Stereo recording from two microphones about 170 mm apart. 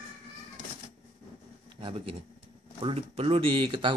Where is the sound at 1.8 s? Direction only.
30° right (ahead or behind).